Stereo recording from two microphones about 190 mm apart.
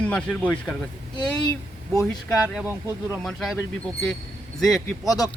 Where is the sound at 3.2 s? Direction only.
Centre (ahead or behind).